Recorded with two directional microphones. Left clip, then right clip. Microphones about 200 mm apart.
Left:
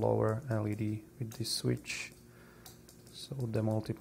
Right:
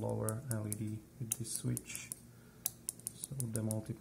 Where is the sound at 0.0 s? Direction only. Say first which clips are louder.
Left 9 dB; 30° left (ahead or behind).